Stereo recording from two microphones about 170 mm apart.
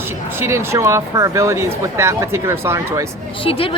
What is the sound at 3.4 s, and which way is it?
Speech, 30° left (ahead or behind).